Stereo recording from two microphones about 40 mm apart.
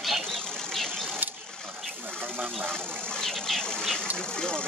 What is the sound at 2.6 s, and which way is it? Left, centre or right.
Vehicle, centre.